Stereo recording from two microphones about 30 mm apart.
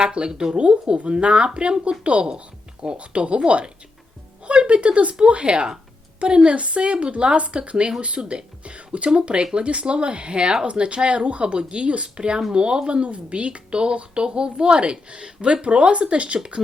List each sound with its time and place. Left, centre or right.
0.0 s a woman's voice: right
0.3 s speech: right
0.5 s a woman's voice: right
10.7 s a woman's voice: right